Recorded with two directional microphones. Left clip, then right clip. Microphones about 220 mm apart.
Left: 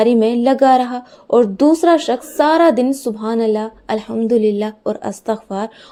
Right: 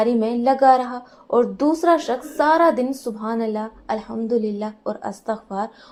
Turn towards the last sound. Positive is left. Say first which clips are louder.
# left 4 dB
turn(degrees=50)  # may be behind; listen again after turning